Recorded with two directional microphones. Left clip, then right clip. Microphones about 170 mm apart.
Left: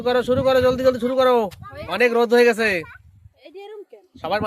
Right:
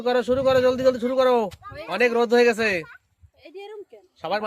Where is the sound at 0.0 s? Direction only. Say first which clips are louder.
Left 2 dB; 10° left (ahead or behind).